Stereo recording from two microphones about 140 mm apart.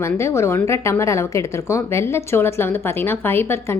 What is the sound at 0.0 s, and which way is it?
Speech, 20° left (ahead or behind).